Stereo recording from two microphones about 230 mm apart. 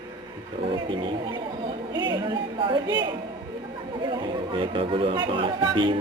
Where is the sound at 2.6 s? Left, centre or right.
Right.